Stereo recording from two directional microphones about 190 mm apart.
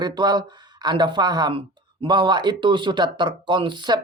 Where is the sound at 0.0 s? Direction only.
20° right (ahead or behind).